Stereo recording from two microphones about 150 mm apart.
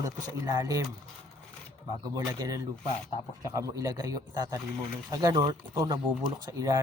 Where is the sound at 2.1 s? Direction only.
20° right (ahead or behind).